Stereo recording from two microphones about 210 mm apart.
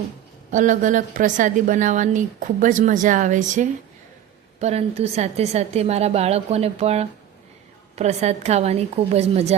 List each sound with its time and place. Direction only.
0.5 s a woman's voice: 35° right (ahead or behind)